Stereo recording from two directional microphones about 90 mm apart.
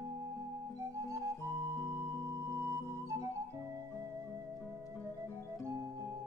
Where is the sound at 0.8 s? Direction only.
35° right (ahead or behind).